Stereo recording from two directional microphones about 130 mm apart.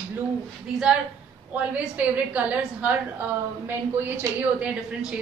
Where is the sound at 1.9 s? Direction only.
10° right (ahead or behind).